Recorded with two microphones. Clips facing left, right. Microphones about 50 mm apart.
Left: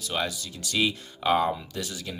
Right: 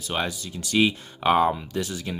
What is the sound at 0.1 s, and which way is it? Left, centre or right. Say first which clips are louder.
Speech: right 2 dB; right.